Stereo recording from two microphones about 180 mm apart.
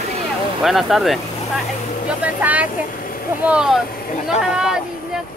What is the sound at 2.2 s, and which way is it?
Speech, 10° right (ahead or behind).